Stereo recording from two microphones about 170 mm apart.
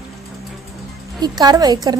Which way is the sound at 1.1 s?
25° right (ahead or behind).